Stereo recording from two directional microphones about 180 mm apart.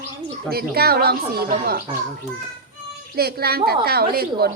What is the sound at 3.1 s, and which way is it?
Speech, 60° right (ahead or behind).